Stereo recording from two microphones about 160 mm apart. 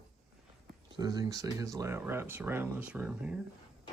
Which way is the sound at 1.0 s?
25° right (ahead or behind).